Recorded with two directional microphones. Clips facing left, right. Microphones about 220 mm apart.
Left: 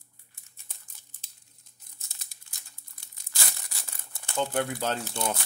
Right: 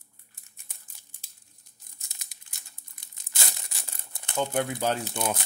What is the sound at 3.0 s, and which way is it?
Crumpling, 20° right (ahead or behind).